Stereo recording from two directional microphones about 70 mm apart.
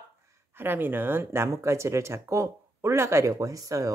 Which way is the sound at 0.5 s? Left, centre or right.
Right.